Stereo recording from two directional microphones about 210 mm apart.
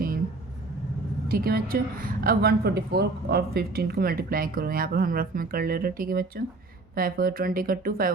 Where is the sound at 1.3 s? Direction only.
45° right (ahead or behind).